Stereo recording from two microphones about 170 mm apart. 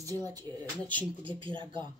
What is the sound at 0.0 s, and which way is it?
Speech, 20° right (ahead or behind).